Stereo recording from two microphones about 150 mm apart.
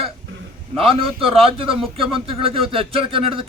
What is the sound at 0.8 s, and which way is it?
Speech, 40° right (ahead or behind).